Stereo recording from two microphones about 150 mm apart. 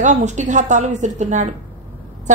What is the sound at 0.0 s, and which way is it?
A woman's voice, 50° right (ahead or behind).